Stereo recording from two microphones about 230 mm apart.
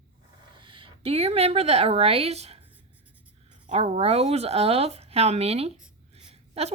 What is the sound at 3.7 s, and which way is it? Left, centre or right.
A woman's voice, right.